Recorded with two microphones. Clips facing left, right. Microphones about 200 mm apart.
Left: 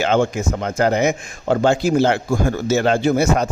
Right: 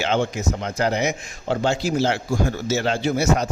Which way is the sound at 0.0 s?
50° left (ahead or behind).